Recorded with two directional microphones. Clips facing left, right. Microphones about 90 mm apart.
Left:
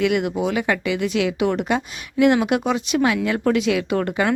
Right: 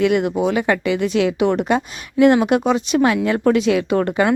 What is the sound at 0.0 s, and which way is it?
Speech, 35° right (ahead or behind).